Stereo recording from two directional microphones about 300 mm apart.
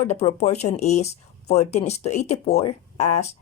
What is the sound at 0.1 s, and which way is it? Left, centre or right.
A woman's voice, left.